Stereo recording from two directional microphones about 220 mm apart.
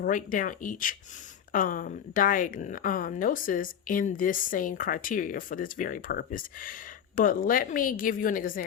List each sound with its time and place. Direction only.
0.0 s a woman's voice: 35° left (ahead or behind)